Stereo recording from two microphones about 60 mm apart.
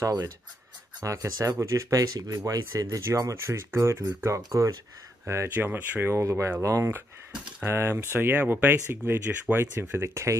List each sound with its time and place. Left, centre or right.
0.0 s speech: right
1.0 s speech: right
3.1 s speech: right
4.5 s speech: right
5.5 s speech: right
6.1 s speech: right
7.6 s speech: right